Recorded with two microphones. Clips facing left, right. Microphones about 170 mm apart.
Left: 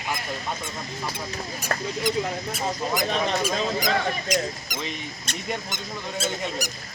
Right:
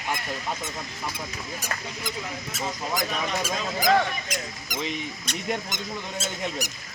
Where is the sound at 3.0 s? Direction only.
30° left (ahead or behind).